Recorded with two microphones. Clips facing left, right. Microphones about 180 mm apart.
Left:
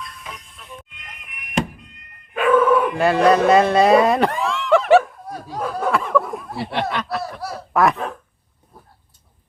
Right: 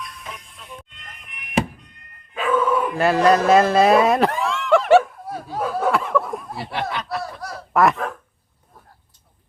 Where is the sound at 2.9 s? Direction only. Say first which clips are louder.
Left 1 dB; centre (ahead or behind).